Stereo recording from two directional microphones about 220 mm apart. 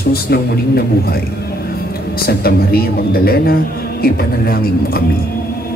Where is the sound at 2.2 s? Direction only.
45° left (ahead or behind).